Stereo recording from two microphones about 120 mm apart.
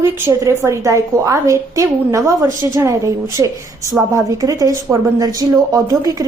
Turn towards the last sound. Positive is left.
turn(degrees=-30)  # may be behind; listen again after turning